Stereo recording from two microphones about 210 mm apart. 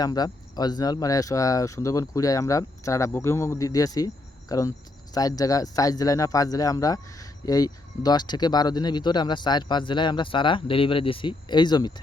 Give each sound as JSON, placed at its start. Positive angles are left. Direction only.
{"t": 0.0, "sound": "speech", "side_deg": 20}